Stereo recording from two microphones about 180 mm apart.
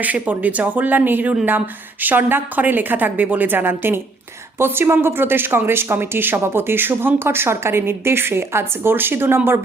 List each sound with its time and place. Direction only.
0.0 s speech: 10° right (ahead or behind)